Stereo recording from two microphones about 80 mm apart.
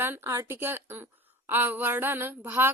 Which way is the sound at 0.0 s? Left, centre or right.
Right.